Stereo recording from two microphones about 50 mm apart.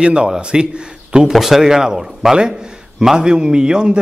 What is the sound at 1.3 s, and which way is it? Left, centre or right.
A man's voice, centre.